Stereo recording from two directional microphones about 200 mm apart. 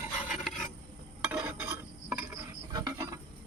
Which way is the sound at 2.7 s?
15° right (ahead or behind).